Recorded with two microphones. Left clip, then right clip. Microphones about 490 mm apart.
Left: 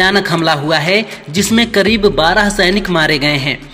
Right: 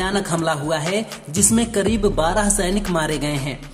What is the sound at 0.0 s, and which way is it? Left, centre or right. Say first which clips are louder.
Speech: left 10 dB; right.